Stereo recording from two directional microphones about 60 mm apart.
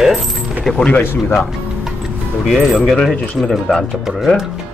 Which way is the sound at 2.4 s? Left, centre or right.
Centre.